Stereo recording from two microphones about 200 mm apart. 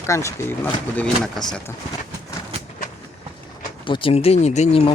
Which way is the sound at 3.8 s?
25° left (ahead or behind).